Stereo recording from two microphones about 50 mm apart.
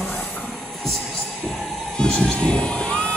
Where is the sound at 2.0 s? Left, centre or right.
Centre.